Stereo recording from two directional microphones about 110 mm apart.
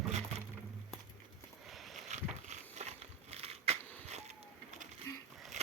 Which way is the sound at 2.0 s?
90° right.